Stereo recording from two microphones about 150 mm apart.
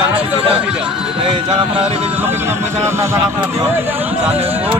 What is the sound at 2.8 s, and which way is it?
Speech, 15° right (ahead or behind).